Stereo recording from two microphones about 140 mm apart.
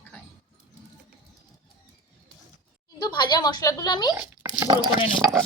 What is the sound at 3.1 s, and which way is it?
Speech, 30° left (ahead or behind).